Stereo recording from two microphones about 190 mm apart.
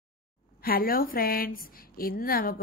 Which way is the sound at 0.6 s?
50° left (ahead or behind).